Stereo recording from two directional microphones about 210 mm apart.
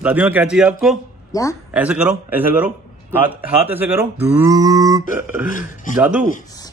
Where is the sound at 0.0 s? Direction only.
10° right (ahead or behind).